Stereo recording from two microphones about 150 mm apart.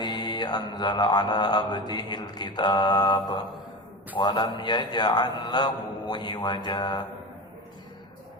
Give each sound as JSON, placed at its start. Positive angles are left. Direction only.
{"t": 0.0, "sound": "mantra", "side_deg": 30}